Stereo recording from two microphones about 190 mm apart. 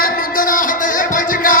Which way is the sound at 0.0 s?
45° left (ahead or behind).